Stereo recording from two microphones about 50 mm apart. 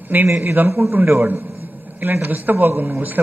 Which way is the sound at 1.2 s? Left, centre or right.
Right.